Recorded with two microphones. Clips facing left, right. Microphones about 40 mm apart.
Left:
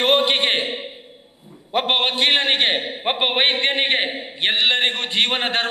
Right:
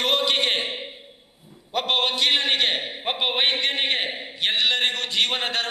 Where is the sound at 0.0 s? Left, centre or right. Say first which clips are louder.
Left 4 dB; left.